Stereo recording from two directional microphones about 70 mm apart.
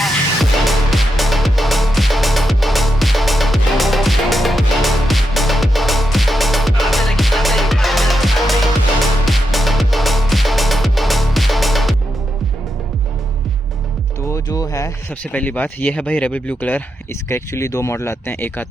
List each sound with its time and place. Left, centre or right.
0.6 s music: centre
14.3 s music: left
15.3 s speech: left
17.2 s speech: left
18.3 s speech: left